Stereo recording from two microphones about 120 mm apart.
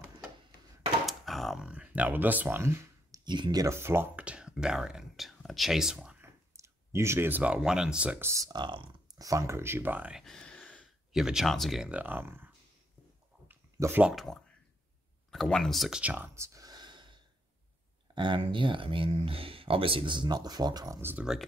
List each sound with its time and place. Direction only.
1.0 s typewriter: centre (ahead or behind)
1.7 s speech: 10° right (ahead or behind)
3.3 s speech: 40° right (ahead or behind)
3.6 s speech: 20° right (ahead or behind); by 6.1 s 5° right (ahead or behind)
6.2 s speech: 25° right (ahead or behind); by 8.2 s 10° right (ahead or behind)
8.2 s speech: 25° right (ahead or behind); by 8.9 s 45° right (ahead or behind)
9.2 s speech: 30° right (ahead or behind); by 10.2 s 10° right (ahead or behind)
10.2 s a sound: 5° left (ahead or behind)
11.1 s speech: 5° right (ahead or behind)
13.5 s a sound: 20° right (ahead or behind)
14.0 s speech: centre (ahead or behind)
16.0 s a sound: 15° right (ahead or behind); by 17.2 s 40° right (ahead or behind)
18.1 s speech: 40° right (ahead or behind)
21.0 s speech: 15° right (ahead or behind)